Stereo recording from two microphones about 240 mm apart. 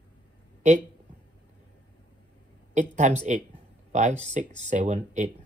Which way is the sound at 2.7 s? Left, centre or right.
Right.